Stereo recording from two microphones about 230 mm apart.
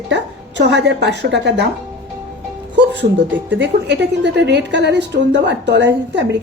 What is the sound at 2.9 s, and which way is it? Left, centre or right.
A woman's voice, right.